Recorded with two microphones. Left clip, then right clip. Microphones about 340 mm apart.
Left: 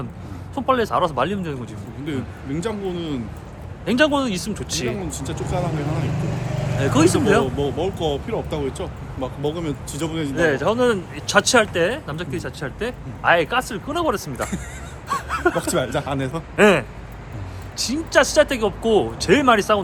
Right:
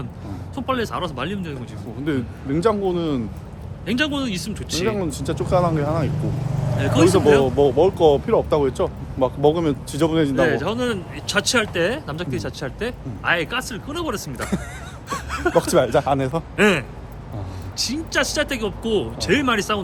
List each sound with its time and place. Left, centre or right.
0.5 s speech: centre
2.0 s speech: centre
3.8 s speech: centre
4.9 s speech: centre
6.7 s speech: centre
7.6 s speech: centre
10.3 s speech: centre
15.1 s a sound: centre
15.6 s speech: centre
16.6 s speech: centre